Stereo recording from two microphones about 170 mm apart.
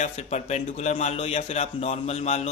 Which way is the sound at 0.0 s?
40° left (ahead or behind).